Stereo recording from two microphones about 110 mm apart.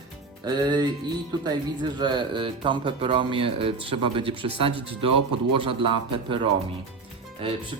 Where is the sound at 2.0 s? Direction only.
45° right (ahead or behind).